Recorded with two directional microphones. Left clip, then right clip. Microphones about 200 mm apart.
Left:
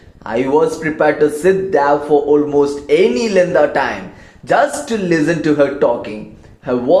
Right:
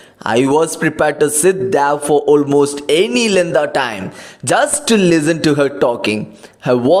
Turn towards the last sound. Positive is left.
turn(degrees=-45)  # may be behind; listen again after turning